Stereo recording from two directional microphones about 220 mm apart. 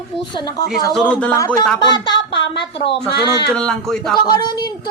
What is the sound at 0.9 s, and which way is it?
A woman's voice, 5° left (ahead or behind).